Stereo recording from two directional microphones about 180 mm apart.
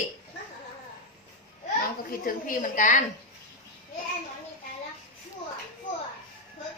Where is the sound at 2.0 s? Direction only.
50° left (ahead or behind).